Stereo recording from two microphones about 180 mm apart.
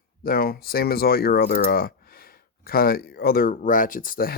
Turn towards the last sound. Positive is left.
turn(degrees=55)  # may be behind; listen again after turning